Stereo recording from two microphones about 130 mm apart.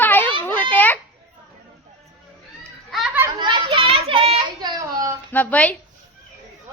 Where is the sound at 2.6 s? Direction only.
Centre (ahead or behind).